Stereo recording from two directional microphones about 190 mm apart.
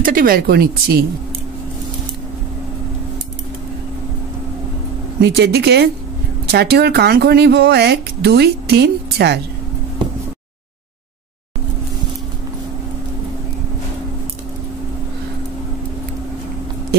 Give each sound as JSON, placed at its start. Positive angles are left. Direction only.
{"t": 0.0, "sound": "speech", "side_deg": -50}
{"t": 5.2, "sound": "speech", "side_deg": -60}